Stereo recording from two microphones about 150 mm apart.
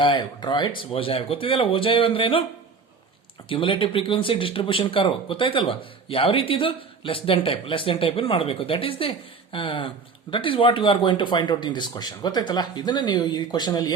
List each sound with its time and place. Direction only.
0.0 s speech: 30° left (ahead or behind)
3.5 s speech: 35° left (ahead or behind)